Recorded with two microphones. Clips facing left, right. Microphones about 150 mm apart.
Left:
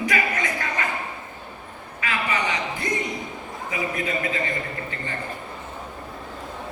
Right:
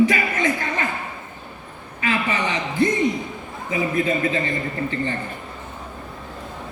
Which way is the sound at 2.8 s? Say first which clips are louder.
Right 13 dB; 25° right (ahead or behind).